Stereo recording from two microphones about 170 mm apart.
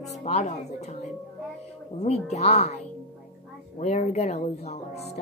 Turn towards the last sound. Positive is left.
turn(degrees=40)  # may be behind; listen again after turning